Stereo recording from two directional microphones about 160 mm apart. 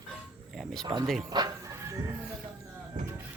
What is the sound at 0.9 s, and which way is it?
Speech, 25° right (ahead or behind).